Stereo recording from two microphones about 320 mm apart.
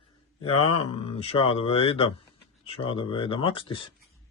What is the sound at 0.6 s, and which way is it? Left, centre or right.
Speech, left.